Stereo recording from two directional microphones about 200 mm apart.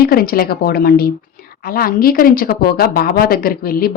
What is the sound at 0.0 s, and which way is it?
A woman's voice, 50° left (ahead or behind).